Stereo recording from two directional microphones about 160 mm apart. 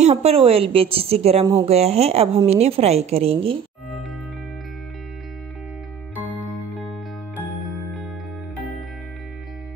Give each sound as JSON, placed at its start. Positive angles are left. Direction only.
{"t": 0.0, "sound": "a woman's voice", "side_deg": -40}
{"t": 1.4, "sound": "speech", "side_deg": -25}
{"t": 1.7, "sound": "a woman's voice", "side_deg": -40}